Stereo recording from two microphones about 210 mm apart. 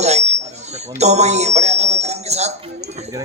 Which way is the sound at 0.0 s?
30° right (ahead or behind).